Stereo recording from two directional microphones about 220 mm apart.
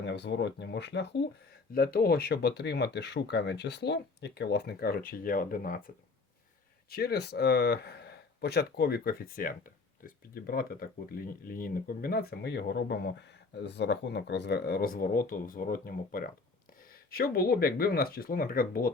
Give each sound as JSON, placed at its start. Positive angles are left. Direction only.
{"t": 0.0, "sound": "speech", "side_deg": 50}
{"t": 6.9, "sound": "speech", "side_deg": 45}